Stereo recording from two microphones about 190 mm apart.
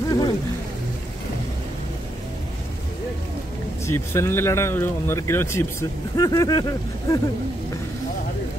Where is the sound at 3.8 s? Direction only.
15° left (ahead or behind).